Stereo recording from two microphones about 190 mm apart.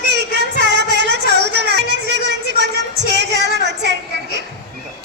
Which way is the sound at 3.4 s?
65° right (ahead or behind).